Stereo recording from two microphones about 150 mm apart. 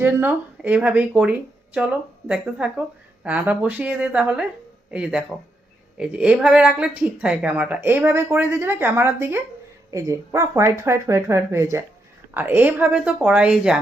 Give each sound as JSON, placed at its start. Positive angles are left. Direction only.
{"t": 0.0, "sound": "a woman's voice", "side_deg": -10}